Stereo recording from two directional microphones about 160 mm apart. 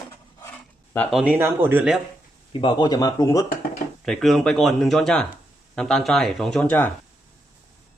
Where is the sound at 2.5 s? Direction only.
30° left (ahead or behind).